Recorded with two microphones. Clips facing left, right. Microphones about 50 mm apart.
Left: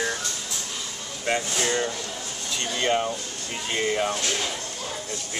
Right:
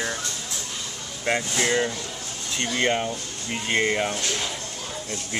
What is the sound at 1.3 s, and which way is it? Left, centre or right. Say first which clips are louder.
Speech: right 1 dB; right.